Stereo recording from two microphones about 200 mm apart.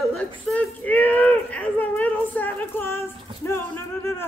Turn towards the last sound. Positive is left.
turn(degrees=15)  # may be behind; listen again after turning